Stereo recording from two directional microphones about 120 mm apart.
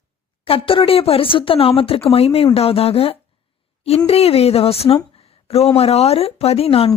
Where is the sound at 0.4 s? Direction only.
50° left (ahead or behind).